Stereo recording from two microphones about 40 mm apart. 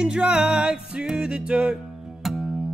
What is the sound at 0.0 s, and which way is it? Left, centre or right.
Music, right.